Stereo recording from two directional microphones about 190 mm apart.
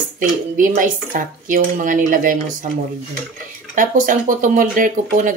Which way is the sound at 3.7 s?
45° right (ahead or behind).